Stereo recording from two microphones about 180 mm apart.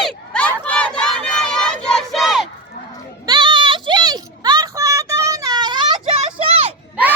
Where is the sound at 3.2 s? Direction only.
25° right (ahead or behind).